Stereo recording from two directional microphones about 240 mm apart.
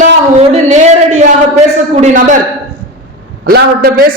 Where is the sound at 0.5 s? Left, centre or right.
Right.